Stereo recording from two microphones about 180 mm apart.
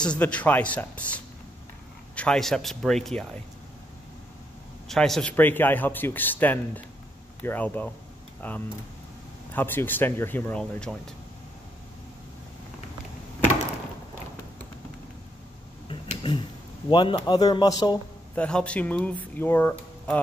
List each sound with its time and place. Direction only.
0.0 s speech: 5° left (ahead or behind)
4.8 s speech: centre (ahead or behind)
15.9 s a sound: 30° left (ahead or behind)
16.9 s a man's voice: 25° left (ahead or behind)
18.3 s speech: 5° left (ahead or behind)